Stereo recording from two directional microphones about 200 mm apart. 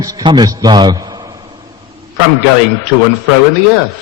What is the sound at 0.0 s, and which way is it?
A man's voice, 20° right (ahead or behind).